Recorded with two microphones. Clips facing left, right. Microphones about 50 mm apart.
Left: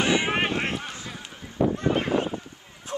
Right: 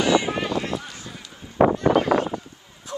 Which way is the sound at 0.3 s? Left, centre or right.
Left.